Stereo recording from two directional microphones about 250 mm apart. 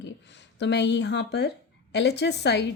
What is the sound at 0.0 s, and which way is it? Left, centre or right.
Speech, left.